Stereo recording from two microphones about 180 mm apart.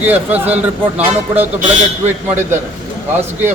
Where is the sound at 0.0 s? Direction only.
10° right (ahead or behind).